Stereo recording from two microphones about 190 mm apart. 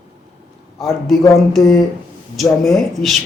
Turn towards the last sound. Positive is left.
turn(degrees=0)  # may be behind; listen again after turning